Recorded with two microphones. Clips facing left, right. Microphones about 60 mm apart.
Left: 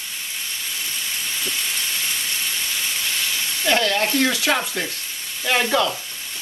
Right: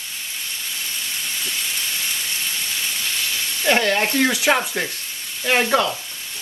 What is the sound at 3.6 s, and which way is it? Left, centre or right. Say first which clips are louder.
Speech: right 2 dB; right.